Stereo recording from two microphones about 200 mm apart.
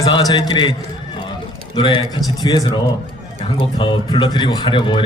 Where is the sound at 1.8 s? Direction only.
25° left (ahead or behind).